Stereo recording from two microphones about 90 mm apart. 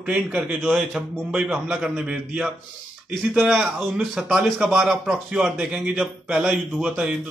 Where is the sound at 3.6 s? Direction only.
10° right (ahead or behind).